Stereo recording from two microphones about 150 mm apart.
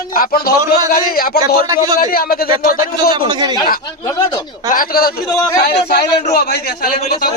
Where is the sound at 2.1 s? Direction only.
85° left.